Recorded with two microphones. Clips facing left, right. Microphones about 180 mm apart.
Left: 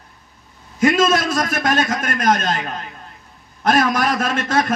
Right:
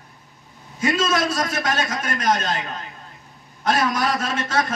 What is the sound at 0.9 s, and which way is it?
A man's voice, 90° left.